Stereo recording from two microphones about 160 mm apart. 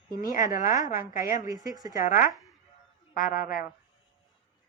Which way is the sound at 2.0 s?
55° left (ahead or behind).